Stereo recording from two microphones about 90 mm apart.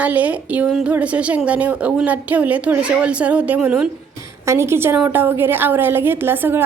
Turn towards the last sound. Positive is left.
turn(degrees=-25)  # may be behind; listen again after turning